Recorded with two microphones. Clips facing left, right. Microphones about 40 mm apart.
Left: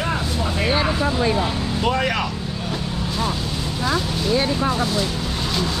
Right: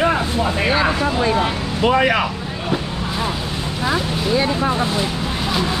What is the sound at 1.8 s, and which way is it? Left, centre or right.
Speech, centre.